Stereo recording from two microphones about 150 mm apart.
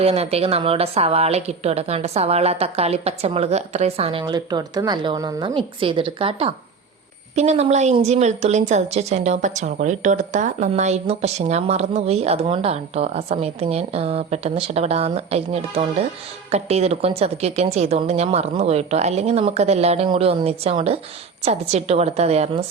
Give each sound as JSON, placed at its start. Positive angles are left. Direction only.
{"t": 0.0, "sound": "a woman's voice", "side_deg": -40}
{"t": 4.2, "sound": "speech", "side_deg": -30}
{"t": 7.3, "sound": "a woman's voice", "side_deg": -45}